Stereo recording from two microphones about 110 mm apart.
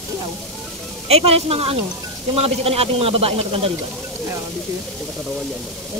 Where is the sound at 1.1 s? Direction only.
65° right (ahead or behind).